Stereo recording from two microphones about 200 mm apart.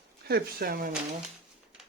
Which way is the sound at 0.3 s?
50° right (ahead or behind).